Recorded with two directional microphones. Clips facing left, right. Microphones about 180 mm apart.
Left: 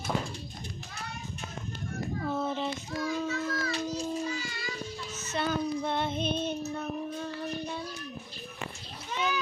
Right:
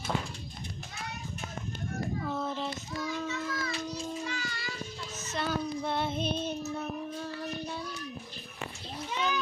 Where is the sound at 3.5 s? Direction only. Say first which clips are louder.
Left 3 dB; 30° left (ahead or behind).